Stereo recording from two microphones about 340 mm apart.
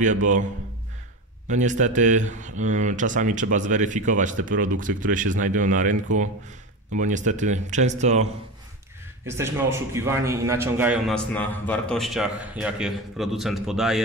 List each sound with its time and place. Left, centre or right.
0.0 s speech: right
1.5 s speech: right
9.2 s a man's voice: centre